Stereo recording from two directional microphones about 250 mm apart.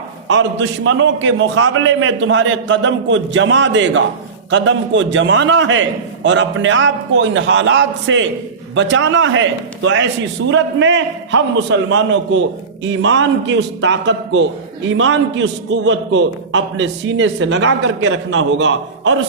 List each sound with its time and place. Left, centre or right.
0.3 s a man's voice: right